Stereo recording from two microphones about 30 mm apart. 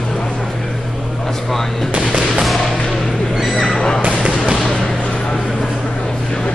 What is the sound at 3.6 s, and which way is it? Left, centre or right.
Neigh, centre.